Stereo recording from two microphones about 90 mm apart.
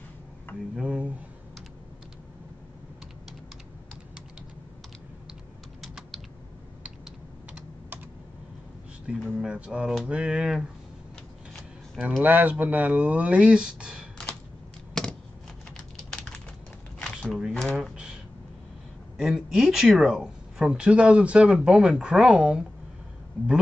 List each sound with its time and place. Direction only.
0.7 s speech: 10° right (ahead or behind)
5.8 s typing: centre (ahead or behind)
9.1 s speech: 15° right (ahead or behind)
12.0 s speech: 20° right (ahead or behind)
15.0 s typewriter: 5° left (ahead or behind)
15.7 s typing: 10° left (ahead or behind)
17.2 s a sound: 5° right (ahead or behind)
19.1 s speech: 5° right (ahead or behind)